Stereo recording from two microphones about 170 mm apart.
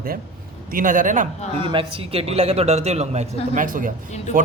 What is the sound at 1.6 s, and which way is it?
A man's voice, 30° right (ahead or behind).